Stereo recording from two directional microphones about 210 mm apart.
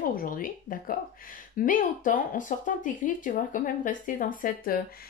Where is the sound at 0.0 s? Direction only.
40° left (ahead or behind).